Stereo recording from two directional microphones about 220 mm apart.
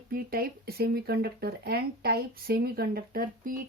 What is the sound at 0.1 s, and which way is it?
Speech, 45° right (ahead or behind).